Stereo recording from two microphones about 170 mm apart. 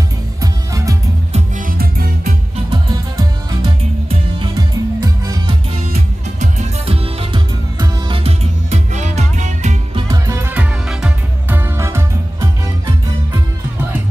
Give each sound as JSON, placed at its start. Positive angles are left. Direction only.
{"t": 0.4, "sound": "music", "side_deg": -20}
{"t": 1.7, "sound": "music", "side_deg": -60}
{"t": 4.1, "sound": "music", "side_deg": -25}
{"t": 5.9, "sound": "music", "side_deg": -45}
{"t": 9.9, "sound": "music", "side_deg": -20}